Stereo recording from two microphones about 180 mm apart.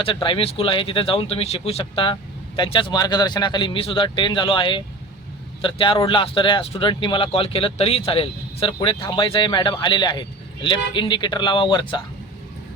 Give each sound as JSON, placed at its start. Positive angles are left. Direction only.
{"t": 0.0, "sound": "a man's voice", "side_deg": 30}